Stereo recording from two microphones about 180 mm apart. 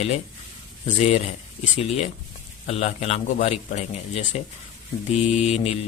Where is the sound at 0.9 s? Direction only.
35° left (ahead or behind).